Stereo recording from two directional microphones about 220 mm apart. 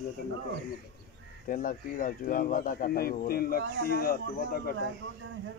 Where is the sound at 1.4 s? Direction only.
40° left (ahead or behind).